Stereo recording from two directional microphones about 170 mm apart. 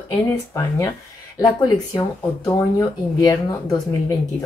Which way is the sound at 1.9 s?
25° left (ahead or behind).